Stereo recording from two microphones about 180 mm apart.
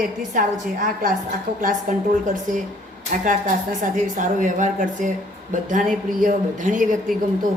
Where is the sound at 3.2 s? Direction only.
45° right (ahead or behind).